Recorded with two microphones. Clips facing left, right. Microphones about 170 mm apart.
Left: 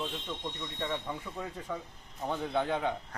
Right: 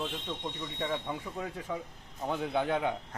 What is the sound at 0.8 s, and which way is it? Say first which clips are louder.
Speech: right 2 dB; 10° right (ahead or behind).